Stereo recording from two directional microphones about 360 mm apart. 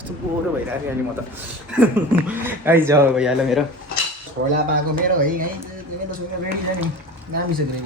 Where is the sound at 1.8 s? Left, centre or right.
Centre.